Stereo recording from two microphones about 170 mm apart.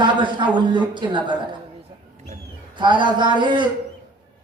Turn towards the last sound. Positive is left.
turn(degrees=-25)  # may be behind; listen again after turning